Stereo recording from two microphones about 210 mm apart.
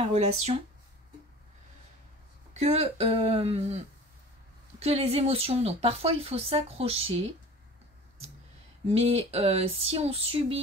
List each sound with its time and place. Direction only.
0.1 s speech: 30° right (ahead or behind)
2.6 s speech: 30° right (ahead or behind)
8.8 s speech: 30° right (ahead or behind)